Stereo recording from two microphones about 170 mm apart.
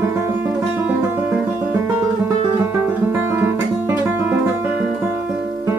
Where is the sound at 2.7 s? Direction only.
10° right (ahead or behind).